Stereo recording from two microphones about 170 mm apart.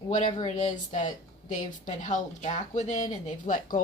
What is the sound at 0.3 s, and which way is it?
Speech, 30° left (ahead or behind).